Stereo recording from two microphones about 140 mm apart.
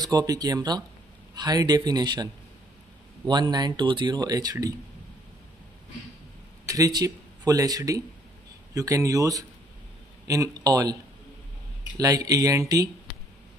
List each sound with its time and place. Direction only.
0.0 s speech: 25° right (ahead or behind)
3.3 s speech: 30° right (ahead or behind)
6.6 s speech: 25° right (ahead or behind)
12.0 s speech: 25° right (ahead or behind)